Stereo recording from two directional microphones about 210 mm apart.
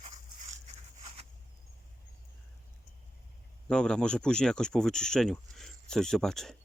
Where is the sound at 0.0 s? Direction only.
35° right (ahead or behind).